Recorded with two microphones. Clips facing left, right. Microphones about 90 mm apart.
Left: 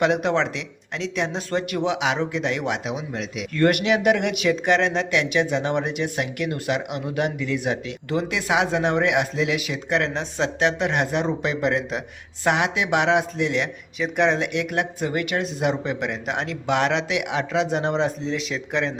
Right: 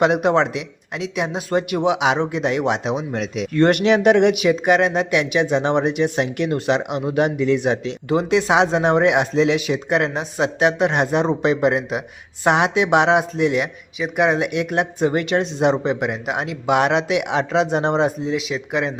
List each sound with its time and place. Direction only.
0.0 s speech: 20° right (ahead or behind)
2.9 s speech: 40° right (ahead or behind)
3.5 s speech: 30° right (ahead or behind)
18.3 s speech: 5° right (ahead or behind)